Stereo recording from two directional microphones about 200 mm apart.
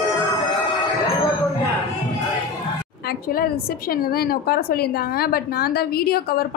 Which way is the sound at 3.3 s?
50° left (ahead or behind).